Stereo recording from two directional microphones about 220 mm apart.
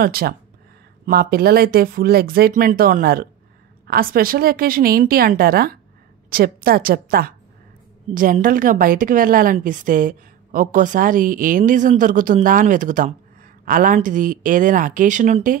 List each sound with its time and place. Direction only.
0.0 s a woman's voice: 45° right (ahead or behind)